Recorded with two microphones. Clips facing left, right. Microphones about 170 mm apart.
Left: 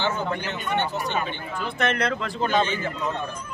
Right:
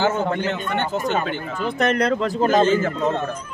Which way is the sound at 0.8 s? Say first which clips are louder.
Right 5 dB; 50° right (ahead or behind).